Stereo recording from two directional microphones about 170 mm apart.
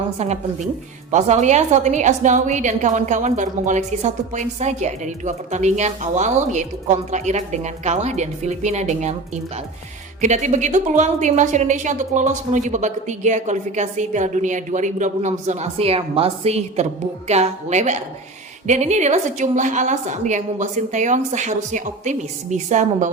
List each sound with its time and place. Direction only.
0.2 s a woman's voice: 40° right (ahead or behind)